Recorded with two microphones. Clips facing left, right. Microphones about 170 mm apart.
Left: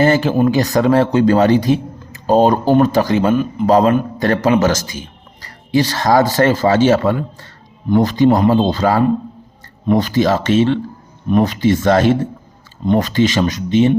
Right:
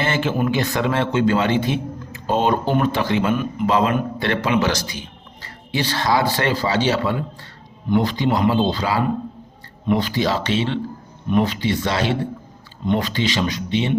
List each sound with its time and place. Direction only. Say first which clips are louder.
0.0 s a man's voice: left 8 dB; 40° left (ahead or behind)